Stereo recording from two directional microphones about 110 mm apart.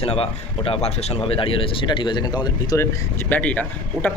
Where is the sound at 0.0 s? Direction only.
60° left (ahead or behind); by 2.7 s 40° left (ahead or behind).